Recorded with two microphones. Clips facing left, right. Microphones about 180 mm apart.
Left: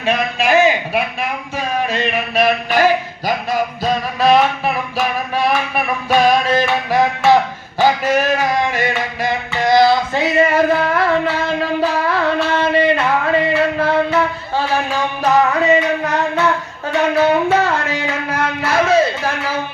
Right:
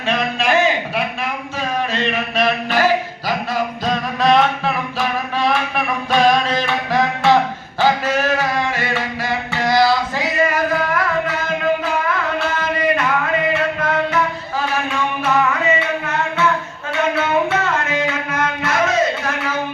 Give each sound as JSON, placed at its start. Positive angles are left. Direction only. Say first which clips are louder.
{"t": 0.0, "sound": "a sound", "louder": "left 2 dB", "side_deg": 10}
{"t": 6.6, "sound": "music", "louder": "left 3 dB", "side_deg": 10}
{"t": 17.2, "sound": "music", "louder": "left 7 dB", "side_deg": 35}